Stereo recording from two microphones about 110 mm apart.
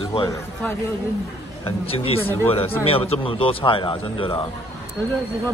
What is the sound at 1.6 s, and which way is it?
Speech, 60° left (ahead or behind).